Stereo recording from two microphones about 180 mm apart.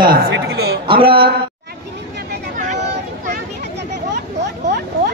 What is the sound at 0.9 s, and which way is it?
Speech, 30° right (ahead or behind).